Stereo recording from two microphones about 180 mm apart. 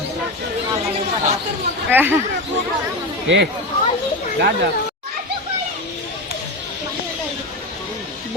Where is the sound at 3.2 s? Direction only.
80° right.